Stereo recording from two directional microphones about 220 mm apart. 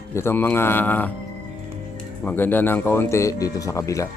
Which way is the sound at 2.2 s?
10° left (ahead or behind).